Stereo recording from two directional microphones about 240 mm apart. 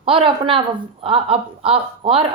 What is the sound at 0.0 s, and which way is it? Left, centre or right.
A woman's voice, right.